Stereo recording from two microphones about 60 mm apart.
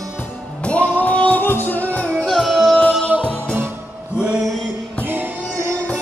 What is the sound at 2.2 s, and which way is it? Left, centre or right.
Music, centre.